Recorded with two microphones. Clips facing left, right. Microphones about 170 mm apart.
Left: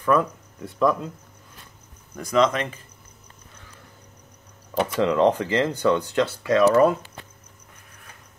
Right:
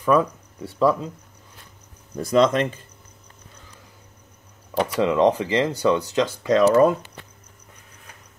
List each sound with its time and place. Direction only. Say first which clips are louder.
0.0 s speech: right 2 dB; 10° right (ahead or behind)
2.1 s speech: right 3 dB; 30° right (ahead or behind)
4.7 s speech: right 1 dB; 10° right (ahead or behind)